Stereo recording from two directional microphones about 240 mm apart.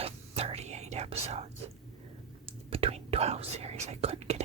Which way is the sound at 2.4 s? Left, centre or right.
Right.